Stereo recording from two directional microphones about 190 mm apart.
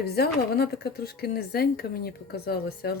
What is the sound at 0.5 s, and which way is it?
Speech, 55° left (ahead or behind).